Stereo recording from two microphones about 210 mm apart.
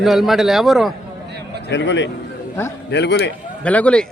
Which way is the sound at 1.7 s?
60° left (ahead or behind).